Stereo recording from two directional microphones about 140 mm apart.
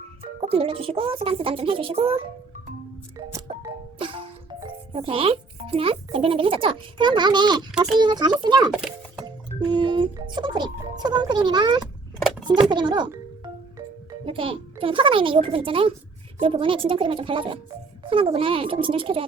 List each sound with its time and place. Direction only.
0.3 s speech: 45° right (ahead or behind)
3.7 s music: 40° right (ahead or behind)
4.9 s a child's voice: 40° right (ahead or behind)
12.2 s a sound: 5° right (ahead or behind)
12.7 s a child's voice: 35° right (ahead or behind)
14.3 s a child's voice: 40° right (ahead or behind)